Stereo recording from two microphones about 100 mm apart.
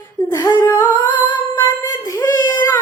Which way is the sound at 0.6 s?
20° left (ahead or behind).